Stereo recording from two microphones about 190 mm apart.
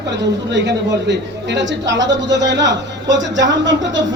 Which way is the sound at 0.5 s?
65° right (ahead or behind).